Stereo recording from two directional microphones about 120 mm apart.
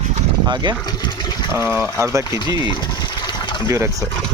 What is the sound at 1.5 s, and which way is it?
Speech, 15° right (ahead or behind).